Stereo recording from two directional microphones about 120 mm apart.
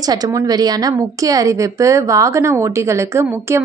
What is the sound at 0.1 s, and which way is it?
A woman's voice, 30° right (ahead or behind).